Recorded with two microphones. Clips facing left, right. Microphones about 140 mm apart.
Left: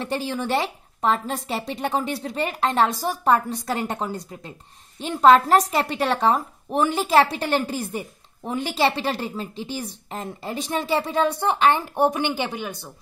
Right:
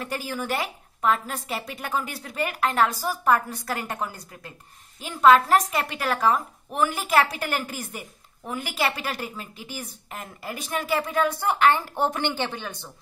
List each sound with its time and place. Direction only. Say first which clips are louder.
0.0 s a woman's voice: left 4 dB; 25° left (ahead or behind)